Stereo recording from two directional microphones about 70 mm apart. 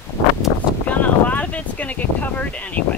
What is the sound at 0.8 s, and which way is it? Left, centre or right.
Speech, left.